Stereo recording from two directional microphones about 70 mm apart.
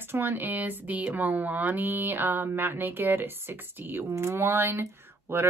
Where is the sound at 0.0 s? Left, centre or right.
Right.